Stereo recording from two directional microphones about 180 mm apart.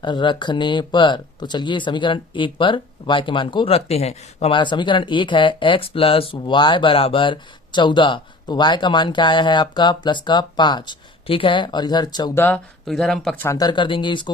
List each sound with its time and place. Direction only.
0.0 s speech: 25° left (ahead or behind)
12.4 s speech: 5° left (ahead or behind)
13.4 s speech: 20° left (ahead or behind)